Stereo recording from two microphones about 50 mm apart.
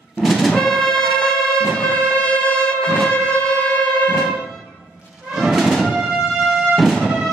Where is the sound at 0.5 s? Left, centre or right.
Centre.